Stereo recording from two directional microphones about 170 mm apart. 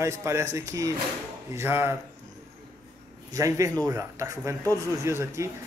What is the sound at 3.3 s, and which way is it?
A man's voice, 20° right (ahead or behind).